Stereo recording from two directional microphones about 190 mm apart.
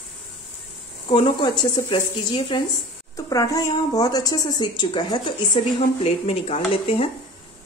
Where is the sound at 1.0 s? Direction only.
25° left (ahead or behind).